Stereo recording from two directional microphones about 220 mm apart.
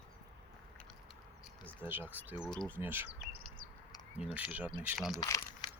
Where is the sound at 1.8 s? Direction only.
10° right (ahead or behind).